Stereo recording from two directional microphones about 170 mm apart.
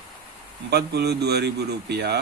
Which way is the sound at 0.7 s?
75° right (ahead or behind).